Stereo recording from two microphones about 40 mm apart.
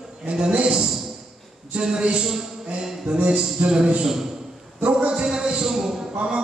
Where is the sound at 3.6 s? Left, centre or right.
Right.